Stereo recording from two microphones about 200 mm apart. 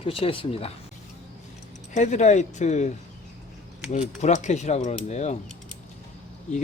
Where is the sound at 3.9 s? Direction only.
35° left (ahead or behind).